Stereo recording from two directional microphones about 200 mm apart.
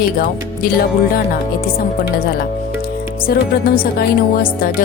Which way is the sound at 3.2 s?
50° left (ahead or behind).